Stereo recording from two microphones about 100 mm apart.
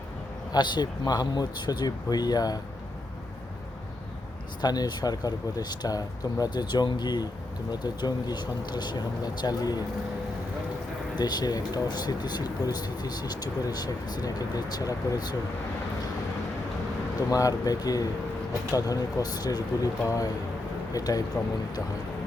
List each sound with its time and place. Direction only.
0.5 s speech: 45° left (ahead or behind)
4.6 s speech: 40° left (ahead or behind)
11.2 s speech: 45° left (ahead or behind)
17.2 s speech: 35° left (ahead or behind)